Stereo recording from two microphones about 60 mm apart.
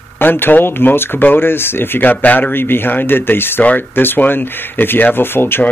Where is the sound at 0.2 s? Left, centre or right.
Left.